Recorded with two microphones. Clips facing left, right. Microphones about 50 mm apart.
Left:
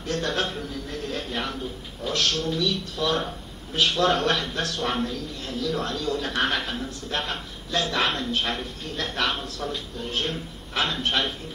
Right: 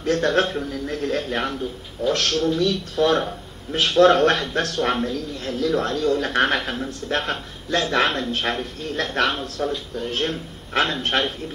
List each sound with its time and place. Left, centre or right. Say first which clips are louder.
0.0 s a man's voice: right 7 dB; right